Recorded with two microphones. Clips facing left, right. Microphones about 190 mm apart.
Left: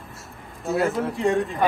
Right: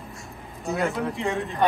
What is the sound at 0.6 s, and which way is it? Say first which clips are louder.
Speech: left 3 dB; centre (ahead or behind).